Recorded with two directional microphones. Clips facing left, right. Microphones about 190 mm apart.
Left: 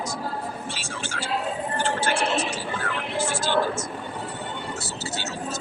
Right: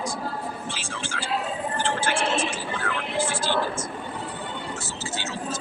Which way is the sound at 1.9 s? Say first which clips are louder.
Left 1 dB; 40° left (ahead or behind).